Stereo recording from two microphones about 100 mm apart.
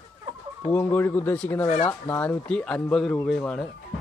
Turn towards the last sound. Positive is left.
turn(degrees=10)  # may be behind; listen again after turning